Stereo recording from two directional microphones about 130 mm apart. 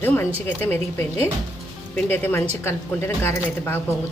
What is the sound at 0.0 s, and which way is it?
Speech, 15° left (ahead or behind).